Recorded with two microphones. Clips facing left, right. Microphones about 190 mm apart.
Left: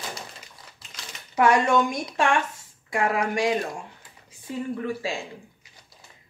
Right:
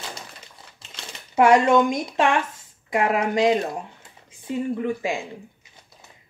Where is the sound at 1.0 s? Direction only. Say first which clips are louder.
Right 4 dB; 25° right (ahead or behind).